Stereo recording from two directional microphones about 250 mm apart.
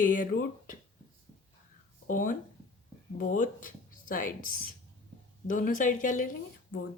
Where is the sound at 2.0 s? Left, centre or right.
Left.